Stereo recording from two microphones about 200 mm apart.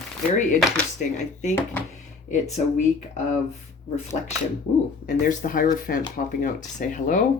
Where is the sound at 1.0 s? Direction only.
40° left (ahead or behind).